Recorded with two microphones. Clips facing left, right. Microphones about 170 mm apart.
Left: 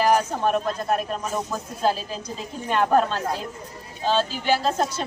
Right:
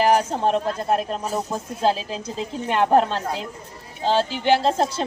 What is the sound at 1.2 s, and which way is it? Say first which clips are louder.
Speech: right 2 dB; 35° right (ahead or behind).